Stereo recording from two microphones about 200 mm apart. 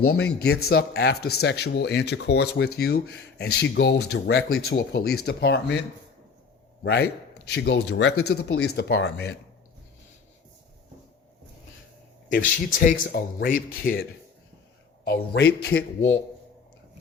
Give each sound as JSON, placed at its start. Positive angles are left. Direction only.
{"t": 0.0, "sound": "speech", "side_deg": 55}
{"t": 6.8, "sound": "speech", "side_deg": 55}
{"t": 8.7, "sound": "speech", "side_deg": 55}
{"t": 12.3, "sound": "speech", "side_deg": 40}